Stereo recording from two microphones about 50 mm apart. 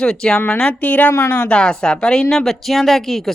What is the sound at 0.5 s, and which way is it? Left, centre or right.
A woman's voice, left.